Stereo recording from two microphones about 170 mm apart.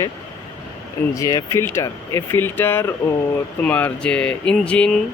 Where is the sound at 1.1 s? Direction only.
20° left (ahead or behind).